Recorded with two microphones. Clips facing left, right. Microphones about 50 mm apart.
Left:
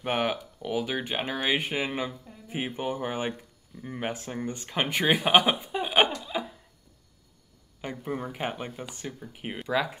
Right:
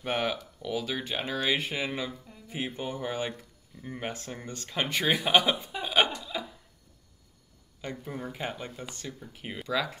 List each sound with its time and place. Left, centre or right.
0.0 s speech: left
3.7 s speech: centre
4.0 s speech: centre
8.0 s speech: left
8.8 s speech: centre